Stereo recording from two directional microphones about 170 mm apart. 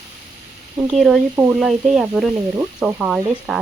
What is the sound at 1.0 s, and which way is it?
A woman's voice, centre (ahead or behind).